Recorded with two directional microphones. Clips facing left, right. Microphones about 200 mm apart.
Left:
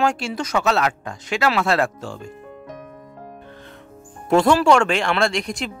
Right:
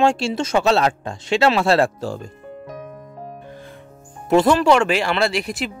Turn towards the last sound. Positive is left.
turn(degrees=-5)  # may be behind; listen again after turning